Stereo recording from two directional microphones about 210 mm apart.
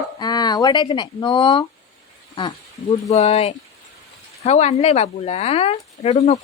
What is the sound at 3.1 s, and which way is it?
Speech, 30° left (ahead or behind).